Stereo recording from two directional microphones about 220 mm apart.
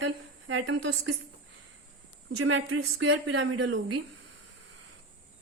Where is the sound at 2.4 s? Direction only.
65° right (ahead or behind).